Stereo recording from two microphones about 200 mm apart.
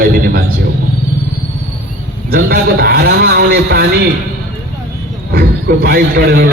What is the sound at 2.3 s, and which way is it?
A man's voice, 50° right (ahead or behind).